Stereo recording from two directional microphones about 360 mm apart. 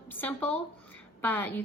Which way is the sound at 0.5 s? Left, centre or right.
Centre.